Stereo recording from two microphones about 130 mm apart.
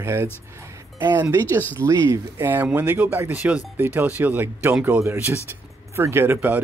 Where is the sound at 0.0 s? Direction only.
20° right (ahead or behind).